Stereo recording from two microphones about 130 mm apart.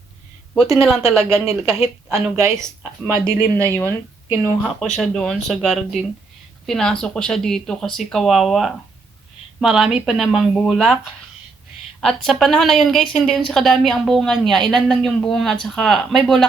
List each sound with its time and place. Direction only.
0.5 s a woman's voice: centre (ahead or behind)
1.1 s speech: 20° right (ahead or behind)
4.6 s a woman's voice: 5° left (ahead or behind)
11.9 s a woman's voice: 5° left (ahead or behind)